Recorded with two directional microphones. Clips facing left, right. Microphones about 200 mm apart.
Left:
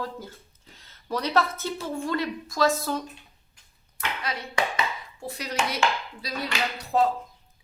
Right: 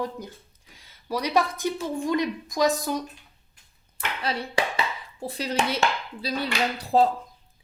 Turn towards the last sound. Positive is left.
turn(degrees=-30)  # may be behind; listen again after turning